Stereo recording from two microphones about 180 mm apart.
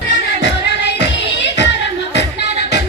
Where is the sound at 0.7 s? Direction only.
70° left (ahead or behind).